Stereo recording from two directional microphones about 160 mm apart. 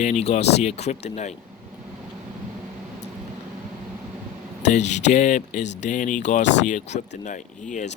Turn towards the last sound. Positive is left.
turn(degrees=50)  # may be behind; listen again after turning